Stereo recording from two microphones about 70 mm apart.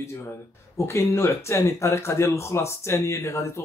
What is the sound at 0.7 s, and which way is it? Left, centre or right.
Speech, left.